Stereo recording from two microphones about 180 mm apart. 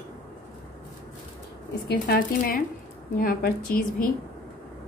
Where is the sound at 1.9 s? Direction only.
55° left (ahead or behind).